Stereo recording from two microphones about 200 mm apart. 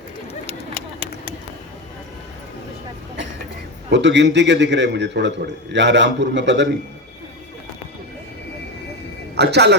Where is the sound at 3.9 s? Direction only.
60° right (ahead or behind).